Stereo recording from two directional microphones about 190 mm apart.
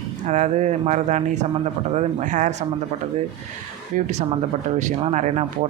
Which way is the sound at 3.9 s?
45° right (ahead or behind).